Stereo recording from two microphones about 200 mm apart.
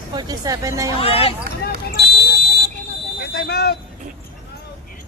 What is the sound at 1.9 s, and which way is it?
Smoke detector, 50° left (ahead or behind).